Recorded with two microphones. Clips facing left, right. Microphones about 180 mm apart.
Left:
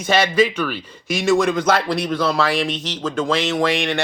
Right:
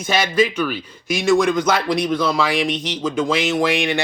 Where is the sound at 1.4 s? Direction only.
10° right (ahead or behind).